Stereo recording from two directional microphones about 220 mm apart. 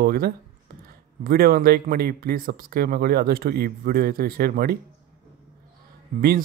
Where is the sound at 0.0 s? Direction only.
45° right (ahead or behind).